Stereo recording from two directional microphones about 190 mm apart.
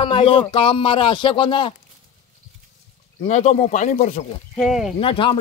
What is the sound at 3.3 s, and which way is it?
Speech, 40° left (ahead or behind).